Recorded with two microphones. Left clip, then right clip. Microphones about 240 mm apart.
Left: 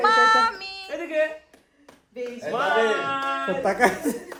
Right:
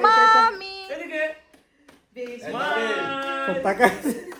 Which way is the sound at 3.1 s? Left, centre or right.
Centre.